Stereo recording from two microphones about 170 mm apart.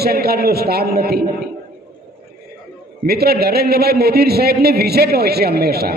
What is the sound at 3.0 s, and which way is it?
A man's voice, 70° right (ahead or behind).